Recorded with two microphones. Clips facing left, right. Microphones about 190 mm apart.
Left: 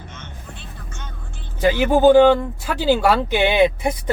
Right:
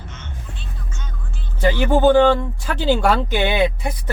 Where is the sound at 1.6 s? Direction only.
10° left (ahead or behind).